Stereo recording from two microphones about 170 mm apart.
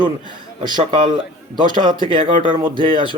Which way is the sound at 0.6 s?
30° right (ahead or behind).